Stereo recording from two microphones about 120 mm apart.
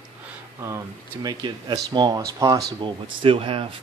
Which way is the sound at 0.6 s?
30° right (ahead or behind).